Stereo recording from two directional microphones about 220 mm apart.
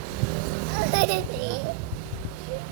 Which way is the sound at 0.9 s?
40° right (ahead or behind).